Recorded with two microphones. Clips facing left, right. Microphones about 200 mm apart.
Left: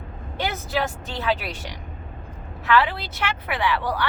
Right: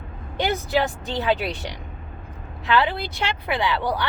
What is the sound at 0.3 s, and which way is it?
A woman's voice, 15° right (ahead or behind).